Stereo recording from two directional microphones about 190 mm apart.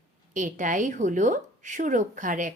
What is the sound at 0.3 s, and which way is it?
Speech, 40° right (ahead or behind).